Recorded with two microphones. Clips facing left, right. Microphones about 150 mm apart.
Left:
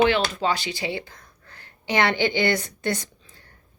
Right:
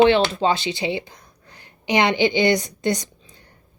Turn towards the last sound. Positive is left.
turn(degrees=-20)  # may be behind; listen again after turning